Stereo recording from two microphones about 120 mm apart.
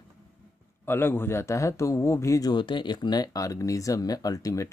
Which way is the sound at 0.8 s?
20° left (ahead or behind).